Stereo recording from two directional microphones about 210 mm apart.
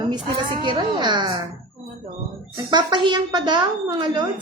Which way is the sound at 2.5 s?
20° right (ahead or behind).